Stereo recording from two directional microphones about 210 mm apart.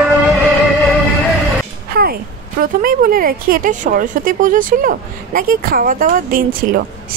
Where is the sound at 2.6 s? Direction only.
40° right (ahead or behind).